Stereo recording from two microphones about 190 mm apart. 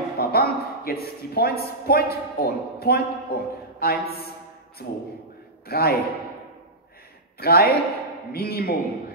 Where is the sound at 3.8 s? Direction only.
55° left (ahead or behind).